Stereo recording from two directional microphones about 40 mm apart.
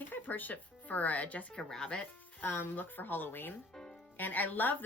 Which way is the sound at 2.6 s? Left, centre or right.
Left.